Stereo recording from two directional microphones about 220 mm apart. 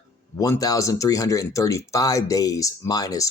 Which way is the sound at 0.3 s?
15° left (ahead or behind).